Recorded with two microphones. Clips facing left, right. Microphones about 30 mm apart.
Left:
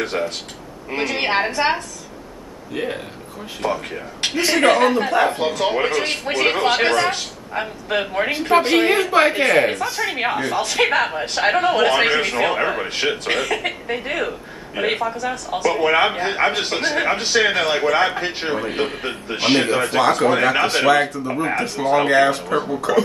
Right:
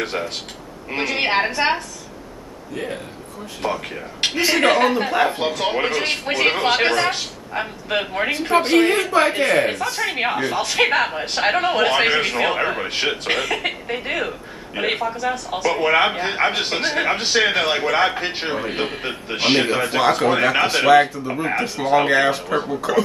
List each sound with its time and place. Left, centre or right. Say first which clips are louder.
0.1 s speech: left 2 dB; centre
2.7 s speech: left 3 dB; left
3.6 s speech: left 1 dB; centre
9.7 s speech: even; centre